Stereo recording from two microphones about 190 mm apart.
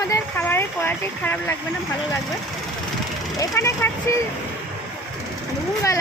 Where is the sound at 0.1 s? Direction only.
10° left (ahead or behind).